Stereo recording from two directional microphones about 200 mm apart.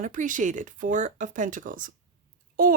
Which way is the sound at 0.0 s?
40° right (ahead or behind).